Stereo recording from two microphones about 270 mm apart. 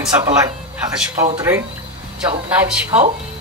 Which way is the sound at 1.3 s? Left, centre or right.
Centre.